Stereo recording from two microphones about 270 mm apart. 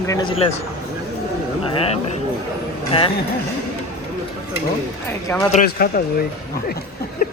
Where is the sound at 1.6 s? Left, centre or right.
Centre.